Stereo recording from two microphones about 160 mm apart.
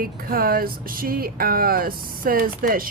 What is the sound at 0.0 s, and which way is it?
Speech, 65° right (ahead or behind).